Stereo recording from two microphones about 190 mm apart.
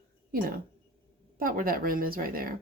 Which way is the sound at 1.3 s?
50° right (ahead or behind).